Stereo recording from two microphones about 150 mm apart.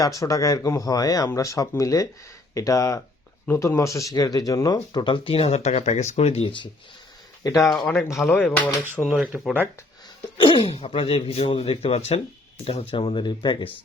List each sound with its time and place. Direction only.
0.2 s speech: 20° left (ahead or behind)
7.4 s speech: 20° left (ahead or behind)
8.3 s speech: 5° left (ahead or behind)
10.3 s speech: 35° left (ahead or behind)